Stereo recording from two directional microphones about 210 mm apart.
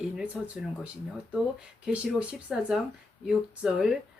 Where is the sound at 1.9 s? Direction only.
5° right (ahead or behind).